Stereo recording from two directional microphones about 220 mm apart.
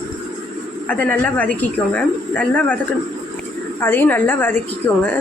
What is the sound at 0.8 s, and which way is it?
A woman's voice, 5° left (ahead or behind).